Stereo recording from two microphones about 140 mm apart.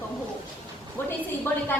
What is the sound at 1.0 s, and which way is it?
Speech, 15° left (ahead or behind).